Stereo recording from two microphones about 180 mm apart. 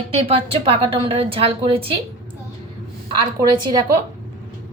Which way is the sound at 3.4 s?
15° right (ahead or behind).